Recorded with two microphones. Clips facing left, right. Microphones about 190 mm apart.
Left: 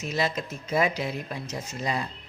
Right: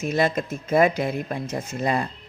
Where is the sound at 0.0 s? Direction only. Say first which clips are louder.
Right 6 dB; 55° right (ahead or behind).